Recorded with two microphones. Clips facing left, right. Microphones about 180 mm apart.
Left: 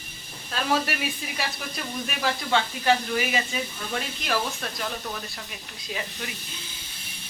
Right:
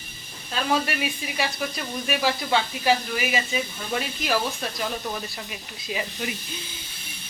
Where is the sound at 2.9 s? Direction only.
10° right (ahead or behind).